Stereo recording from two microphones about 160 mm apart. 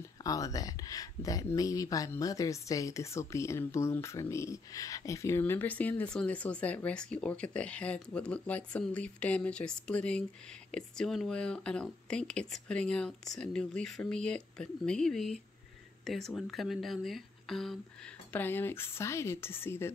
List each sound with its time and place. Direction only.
0.2 s speech: 20° left (ahead or behind); by 17.7 s centre (ahead or behind)
18.3 s speech: 10° left (ahead or behind)